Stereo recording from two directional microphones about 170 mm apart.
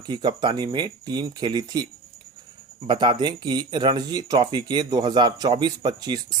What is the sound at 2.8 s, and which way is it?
Speech, 30° right (ahead or behind).